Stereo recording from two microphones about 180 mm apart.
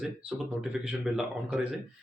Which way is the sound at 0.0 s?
5° right (ahead or behind).